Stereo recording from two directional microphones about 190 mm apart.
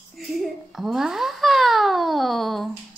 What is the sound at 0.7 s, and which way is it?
Speech, centre (ahead or behind).